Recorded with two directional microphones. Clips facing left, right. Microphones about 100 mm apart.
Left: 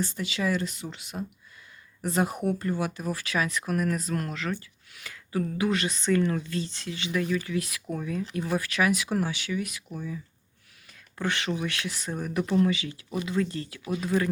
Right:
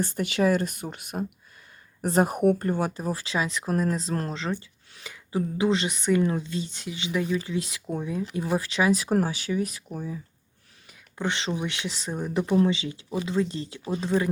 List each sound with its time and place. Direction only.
0.0 s speech: 50° right (ahead or behind)
2.6 s speech: 40° right (ahead or behind)
5.0 s a sound: 20° right (ahead or behind)
5.5 s speech: 20° right (ahead or behind)
8.9 s speech: 40° right (ahead or behind)
11.2 s speech: 20° right (ahead or behind)